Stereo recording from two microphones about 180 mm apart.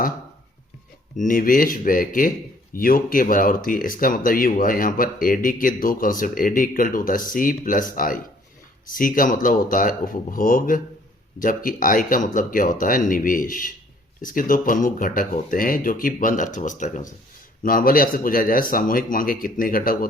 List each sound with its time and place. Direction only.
1.1 s speech: 45° left (ahead or behind)